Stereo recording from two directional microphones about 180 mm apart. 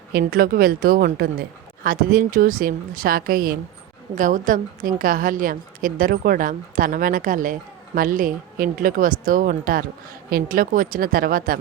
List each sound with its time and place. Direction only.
0.1 s a woman's voice: 55° right (ahead or behind)